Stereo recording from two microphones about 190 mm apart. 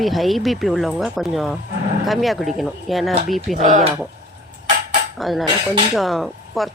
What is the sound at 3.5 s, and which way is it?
Speech, 40° right (ahead or behind).